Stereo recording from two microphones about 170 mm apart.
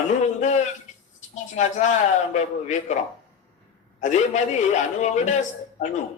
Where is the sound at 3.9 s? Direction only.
45° left (ahead or behind).